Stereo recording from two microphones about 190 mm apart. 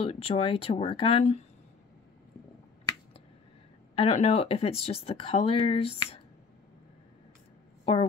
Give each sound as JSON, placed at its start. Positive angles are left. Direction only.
{"t": 0.0, "sound": "speech", "side_deg": 30}
{"t": 3.9, "sound": "speech", "side_deg": 30}
{"t": 7.8, "sound": "a woman's voice", "side_deg": 30}